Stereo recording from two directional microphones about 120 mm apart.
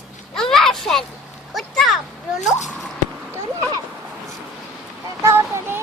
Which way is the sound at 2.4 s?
80° left.